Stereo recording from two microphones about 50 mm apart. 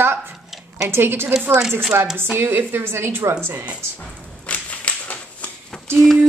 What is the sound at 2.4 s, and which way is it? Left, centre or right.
Speech, right.